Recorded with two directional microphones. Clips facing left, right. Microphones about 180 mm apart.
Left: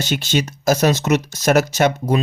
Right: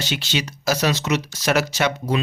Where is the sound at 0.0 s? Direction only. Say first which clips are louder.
Left 5 dB; 45° left (ahead or behind).